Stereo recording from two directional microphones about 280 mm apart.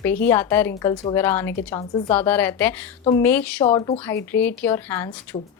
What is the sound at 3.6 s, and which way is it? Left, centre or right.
Speech, centre.